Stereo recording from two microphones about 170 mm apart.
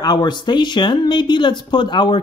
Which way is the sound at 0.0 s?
25° left (ahead or behind).